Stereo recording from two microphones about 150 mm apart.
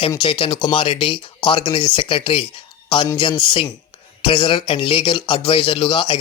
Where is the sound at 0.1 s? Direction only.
35° left (ahead or behind).